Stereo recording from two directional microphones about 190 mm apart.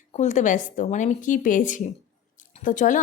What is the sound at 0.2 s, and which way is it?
A woman's voice, 40° left (ahead or behind).